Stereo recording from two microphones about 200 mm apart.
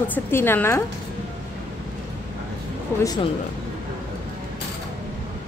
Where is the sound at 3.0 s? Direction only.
20° left (ahead or behind).